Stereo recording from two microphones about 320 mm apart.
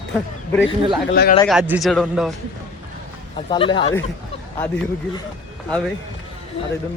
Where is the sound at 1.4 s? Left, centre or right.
Centre.